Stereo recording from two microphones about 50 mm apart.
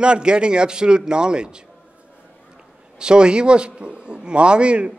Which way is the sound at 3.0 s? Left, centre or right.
Centre.